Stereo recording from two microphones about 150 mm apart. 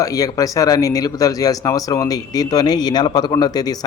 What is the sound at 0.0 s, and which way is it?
Speech, 25° left (ahead or behind).